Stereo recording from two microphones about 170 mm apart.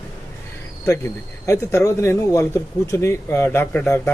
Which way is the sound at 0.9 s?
15° left (ahead or behind).